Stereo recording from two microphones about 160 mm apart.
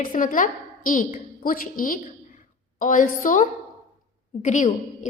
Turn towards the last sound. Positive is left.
turn(degrees=50)  # may be behind; listen again after turning